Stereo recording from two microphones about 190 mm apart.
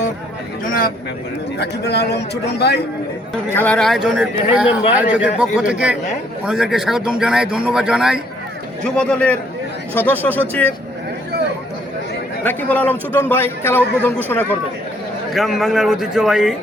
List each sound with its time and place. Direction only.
0.6 s speech: 50° left (ahead or behind)
1.5 s a man's voice: 60° left (ahead or behind)
3.5 s a man's voice: 10° left (ahead or behind)
12.4 s a man's voice: 10° left (ahead or behind)
15.3 s a man's voice: centre (ahead or behind)